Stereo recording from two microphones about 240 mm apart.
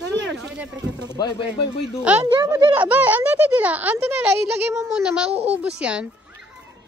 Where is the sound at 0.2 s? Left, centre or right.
Right.